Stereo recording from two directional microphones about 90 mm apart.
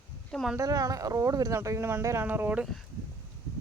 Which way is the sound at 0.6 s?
40° right (ahead or behind).